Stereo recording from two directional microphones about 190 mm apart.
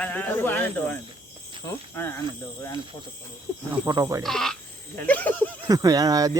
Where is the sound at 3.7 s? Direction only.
15° right (ahead or behind).